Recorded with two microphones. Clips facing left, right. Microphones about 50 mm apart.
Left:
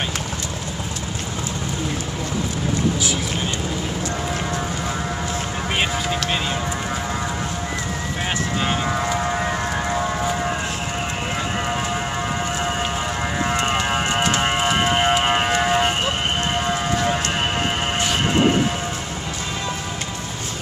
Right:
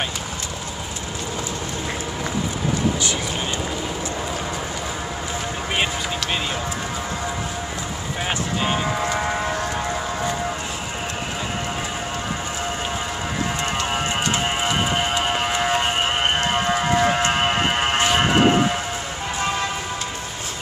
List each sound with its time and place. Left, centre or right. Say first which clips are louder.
15.5 s livestock: left 2 dB; centre
17.0 s siren: right 3 dB; right